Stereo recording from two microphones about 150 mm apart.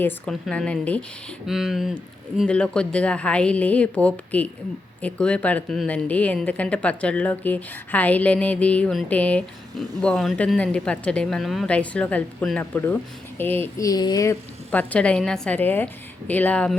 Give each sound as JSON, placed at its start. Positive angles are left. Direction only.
{"t": 0.0, "sound": "speech", "side_deg": 5}
{"t": 14.7, "sound": "speech", "side_deg": 10}